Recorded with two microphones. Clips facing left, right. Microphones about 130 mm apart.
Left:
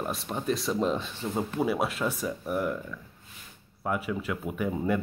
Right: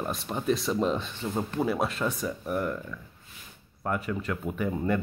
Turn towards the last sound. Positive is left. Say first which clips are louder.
# even
turn(degrees=5)  # may be behind; listen again after turning